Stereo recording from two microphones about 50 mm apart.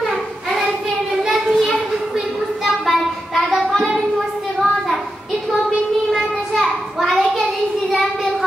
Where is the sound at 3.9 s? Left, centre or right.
Centre.